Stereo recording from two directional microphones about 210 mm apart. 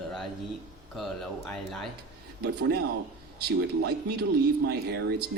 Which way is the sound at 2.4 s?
50° right (ahead or behind).